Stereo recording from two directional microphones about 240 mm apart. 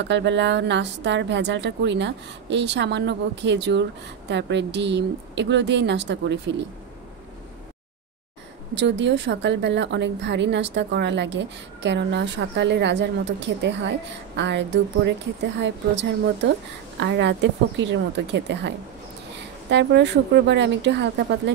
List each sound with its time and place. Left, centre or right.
0.0 s a woman's voice: right
8.7 s a woman's voice: right